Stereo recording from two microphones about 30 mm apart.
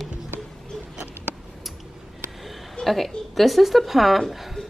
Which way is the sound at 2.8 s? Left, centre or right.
Centre.